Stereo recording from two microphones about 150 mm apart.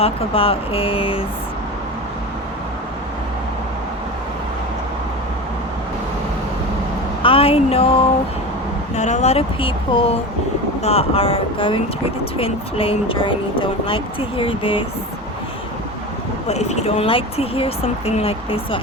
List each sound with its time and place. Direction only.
0.0 s speech: 40° left (ahead or behind)
7.2 s speech: 40° left (ahead or behind)
9.0 s speech: 50° left (ahead or behind)
16.5 s speech: 45° left (ahead or behind)